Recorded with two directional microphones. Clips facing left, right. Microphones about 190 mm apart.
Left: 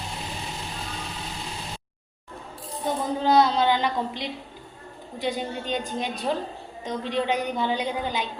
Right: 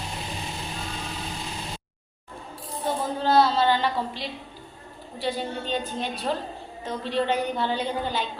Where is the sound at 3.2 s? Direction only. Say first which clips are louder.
Even; 15° left (ahead or behind).